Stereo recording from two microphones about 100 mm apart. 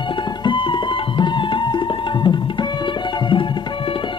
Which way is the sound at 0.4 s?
55° left (ahead or behind).